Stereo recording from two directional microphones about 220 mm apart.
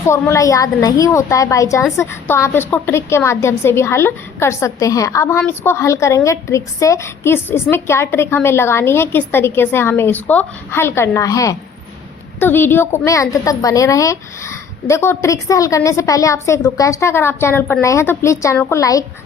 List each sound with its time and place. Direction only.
0.0 s a woman's voice: 10° left (ahead or behind)